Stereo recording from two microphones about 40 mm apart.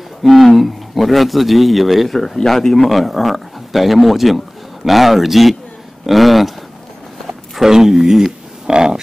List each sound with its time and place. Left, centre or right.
0.2 s speech: centre
2.1 s speech: centre
7.6 s speech: centre
8.6 s a sound: centre